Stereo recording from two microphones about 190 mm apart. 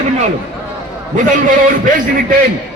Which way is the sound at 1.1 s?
45° right (ahead or behind).